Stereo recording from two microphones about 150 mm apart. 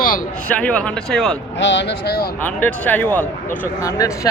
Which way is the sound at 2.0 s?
90° left.